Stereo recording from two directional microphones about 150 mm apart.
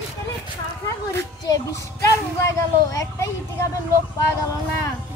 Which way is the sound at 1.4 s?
20° left (ahead or behind).